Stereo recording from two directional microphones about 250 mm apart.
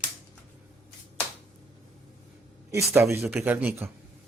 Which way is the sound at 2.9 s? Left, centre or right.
Centre.